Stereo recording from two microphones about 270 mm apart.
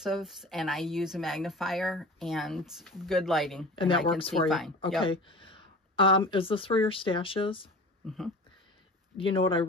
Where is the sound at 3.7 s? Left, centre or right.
Centre.